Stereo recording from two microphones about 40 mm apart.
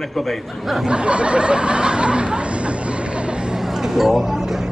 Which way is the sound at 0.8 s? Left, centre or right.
Right.